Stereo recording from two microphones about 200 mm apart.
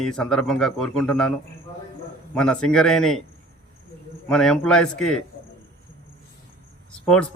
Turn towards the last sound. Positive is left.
turn(degrees=5)  # may be behind; listen again after turning